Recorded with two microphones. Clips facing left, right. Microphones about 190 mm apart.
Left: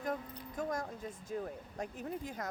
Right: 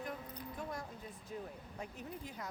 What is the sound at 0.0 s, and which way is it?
Music, 45° left (ahead or behind).